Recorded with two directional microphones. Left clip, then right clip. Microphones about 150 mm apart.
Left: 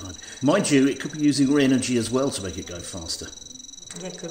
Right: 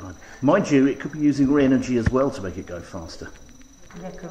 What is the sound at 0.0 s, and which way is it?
Speech, 15° left (ahead or behind).